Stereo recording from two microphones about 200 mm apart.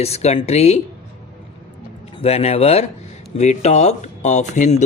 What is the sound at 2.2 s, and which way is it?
Speech, 30° left (ahead or behind).